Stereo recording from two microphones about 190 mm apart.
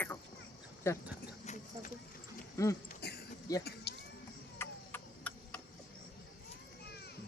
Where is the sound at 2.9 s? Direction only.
55° left (ahead or behind).